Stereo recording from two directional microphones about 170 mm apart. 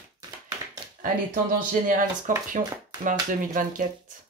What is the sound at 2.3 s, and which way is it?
Speech, 50° right (ahead or behind).